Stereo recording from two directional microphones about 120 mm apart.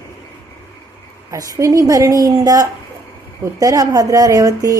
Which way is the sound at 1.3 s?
30° right (ahead or behind).